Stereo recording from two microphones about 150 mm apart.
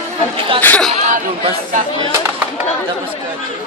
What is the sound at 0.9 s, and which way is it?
Speech, 55° right (ahead or behind).